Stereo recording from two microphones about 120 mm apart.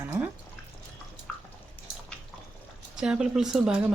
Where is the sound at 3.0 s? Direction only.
5° right (ahead or behind).